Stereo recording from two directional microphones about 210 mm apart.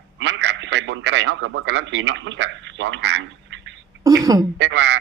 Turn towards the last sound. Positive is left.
turn(degrees=-60)  # may be behind; listen again after turning